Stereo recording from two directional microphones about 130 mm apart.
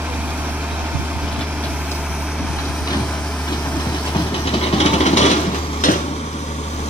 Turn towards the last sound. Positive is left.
turn(degrees=75)  # may be behind; listen again after turning